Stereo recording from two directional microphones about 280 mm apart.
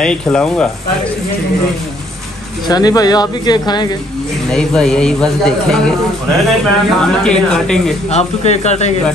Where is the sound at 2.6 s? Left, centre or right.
Centre.